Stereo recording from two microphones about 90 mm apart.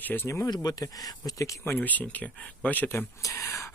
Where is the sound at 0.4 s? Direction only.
45° left (ahead or behind).